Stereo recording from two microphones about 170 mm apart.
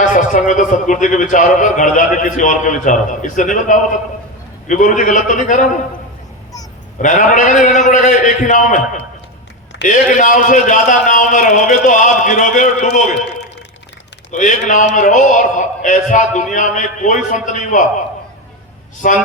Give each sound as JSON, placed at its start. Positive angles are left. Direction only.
{"t": 0.0, "sound": "a man's voice", "side_deg": 50}
{"t": 7.0, "sound": "a man's voice", "side_deg": 50}
{"t": 14.3, "sound": "a man's voice", "side_deg": 50}
{"t": 19.0, "sound": "a man's voice", "side_deg": 50}